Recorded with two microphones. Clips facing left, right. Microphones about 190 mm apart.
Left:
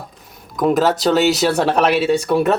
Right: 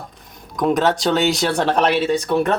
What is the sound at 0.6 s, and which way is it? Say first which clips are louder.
Speech: left 2 dB; 5° left (ahead or behind).